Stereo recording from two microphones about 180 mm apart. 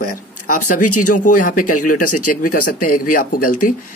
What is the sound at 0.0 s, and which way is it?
Speech, 45° left (ahead or behind).